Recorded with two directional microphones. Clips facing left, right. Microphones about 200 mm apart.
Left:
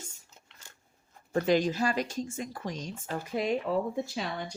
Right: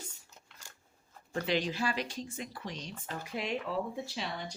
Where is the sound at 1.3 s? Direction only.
45° left (ahead or behind).